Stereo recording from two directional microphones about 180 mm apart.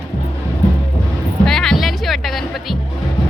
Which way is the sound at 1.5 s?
Centre (ahead or behind).